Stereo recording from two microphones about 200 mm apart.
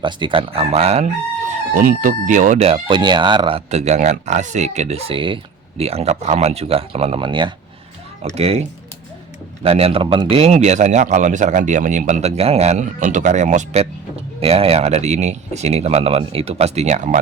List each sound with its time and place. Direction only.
0.0 s speech: 25° right (ahead or behind)
1.7 s speech: 45° right (ahead or behind)
9.6 s speech: 30° right (ahead or behind)